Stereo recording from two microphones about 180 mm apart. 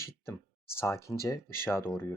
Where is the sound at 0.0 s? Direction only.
15° left (ahead or behind).